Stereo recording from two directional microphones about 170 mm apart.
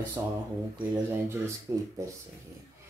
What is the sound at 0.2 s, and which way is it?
Speech, 20° right (ahead or behind).